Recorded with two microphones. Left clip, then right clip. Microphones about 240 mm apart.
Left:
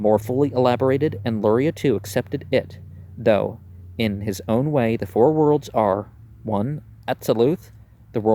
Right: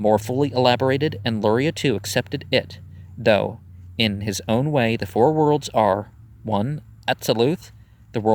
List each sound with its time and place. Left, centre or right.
0.0 s speech: right